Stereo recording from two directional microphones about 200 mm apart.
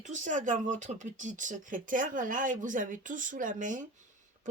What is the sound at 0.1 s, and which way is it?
Speech, 40° right (ahead or behind).